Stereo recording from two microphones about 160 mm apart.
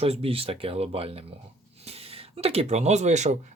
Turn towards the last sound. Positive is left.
turn(degrees=-45)  # may be behind; listen again after turning